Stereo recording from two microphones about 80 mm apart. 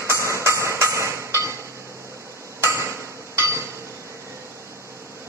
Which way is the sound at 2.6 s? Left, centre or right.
Right.